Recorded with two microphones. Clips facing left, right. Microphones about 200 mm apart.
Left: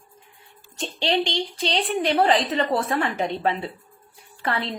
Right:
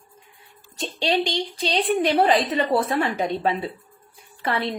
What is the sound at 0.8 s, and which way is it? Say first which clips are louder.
A woman's voice: right 1 dB; 10° right (ahead or behind).